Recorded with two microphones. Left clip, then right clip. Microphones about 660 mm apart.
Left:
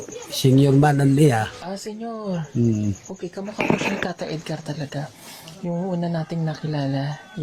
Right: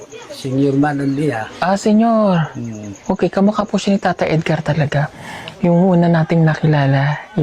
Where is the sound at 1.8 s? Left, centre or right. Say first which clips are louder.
Right 17 dB; right.